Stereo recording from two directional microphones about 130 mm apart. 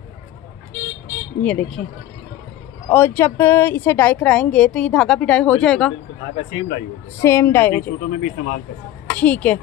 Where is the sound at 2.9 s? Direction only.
15° left (ahead or behind).